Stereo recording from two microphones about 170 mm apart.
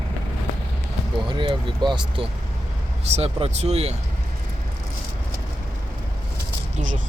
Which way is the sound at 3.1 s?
40° right (ahead or behind).